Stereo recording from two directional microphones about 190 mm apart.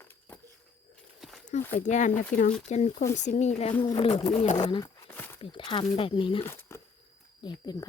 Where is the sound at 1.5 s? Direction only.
40° left (ahead or behind).